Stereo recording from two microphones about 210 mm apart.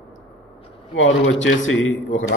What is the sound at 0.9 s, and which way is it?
Speech, 65° left (ahead or behind).